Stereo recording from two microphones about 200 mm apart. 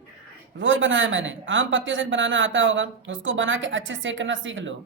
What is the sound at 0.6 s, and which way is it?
Speech, 70° right (ahead or behind).